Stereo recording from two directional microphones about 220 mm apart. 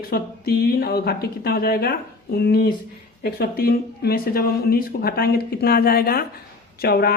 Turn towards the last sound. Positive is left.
turn(degrees=45)  # may be behind; listen again after turning